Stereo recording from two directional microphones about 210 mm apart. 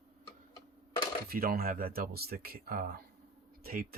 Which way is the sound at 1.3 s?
45° right (ahead or behind).